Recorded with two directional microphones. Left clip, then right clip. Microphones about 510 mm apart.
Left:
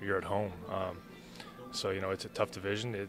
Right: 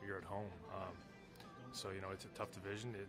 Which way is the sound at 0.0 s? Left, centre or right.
Left.